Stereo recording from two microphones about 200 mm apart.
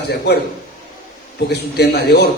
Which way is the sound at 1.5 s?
55° left (ahead or behind).